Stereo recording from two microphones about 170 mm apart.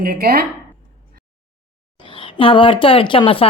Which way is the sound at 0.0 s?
60° right (ahead or behind).